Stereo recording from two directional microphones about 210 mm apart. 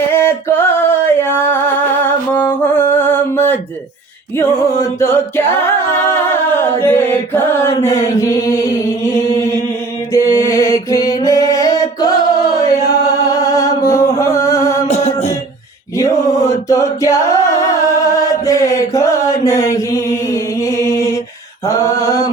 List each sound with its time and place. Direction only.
0.1 s music: 10° left (ahead or behind)
2.9 s mantra: 10° left (ahead or behind)
6.6 s chant: 10° left (ahead or behind)
10.1 s mantra: 15° left (ahead or behind)
14.8 s music: 30° left (ahead or behind)
16.0 s mantra: 15° left (ahead or behind)
16.6 s singing: 15° left (ahead or behind)
21.7 s mantra: 15° left (ahead or behind)